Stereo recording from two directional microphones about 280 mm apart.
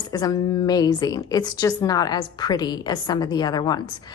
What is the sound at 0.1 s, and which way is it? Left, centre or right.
A woman's voice, centre.